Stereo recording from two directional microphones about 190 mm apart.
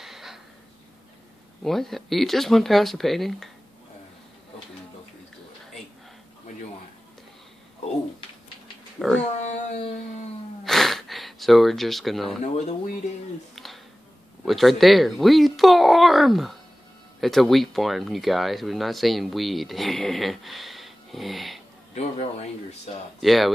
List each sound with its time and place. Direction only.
0.0 s a sound: centre (ahead or behind)
1.6 s speech: centre (ahead or behind)
9.0 s speech: centre (ahead or behind)
10.6 s a sound: centre (ahead or behind)
12.5 s speech: 35° left (ahead or behind)
13.6 s a sound: centre (ahead or behind)
14.4 s speech: centre (ahead or behind)
21.9 s speech: 35° left (ahead or behind)
23.2 s speech: centre (ahead or behind)